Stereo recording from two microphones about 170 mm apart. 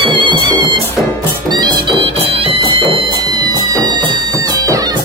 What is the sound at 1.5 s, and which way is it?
Music, 25° right (ahead or behind).